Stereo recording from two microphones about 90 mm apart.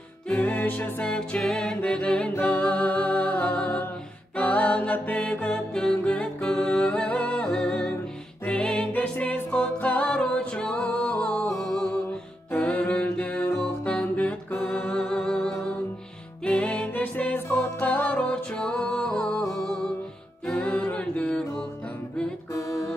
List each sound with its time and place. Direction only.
0.3 s music: 15° left (ahead or behind)
18.3 s music: 10° left (ahead or behind)
20.4 s a capella: 15° left (ahead or behind)
22.5 s music: 35° left (ahead or behind)